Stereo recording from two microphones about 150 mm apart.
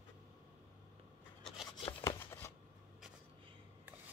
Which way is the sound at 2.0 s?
20° left (ahead or behind).